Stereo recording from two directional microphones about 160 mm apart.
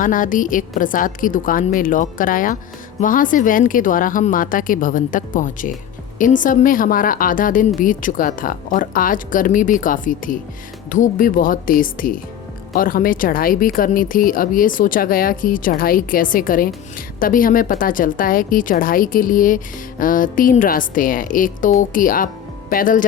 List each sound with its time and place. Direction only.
0.0 s a woman's voice: 55° left (ahead or behind)